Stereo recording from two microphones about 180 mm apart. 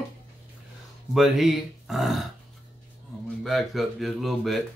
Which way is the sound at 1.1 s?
Centre (ahead or behind).